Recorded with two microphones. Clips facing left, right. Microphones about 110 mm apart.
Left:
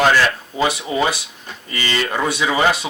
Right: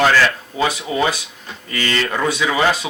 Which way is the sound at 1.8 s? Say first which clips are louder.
Right 1 dB; 15° left (ahead or behind).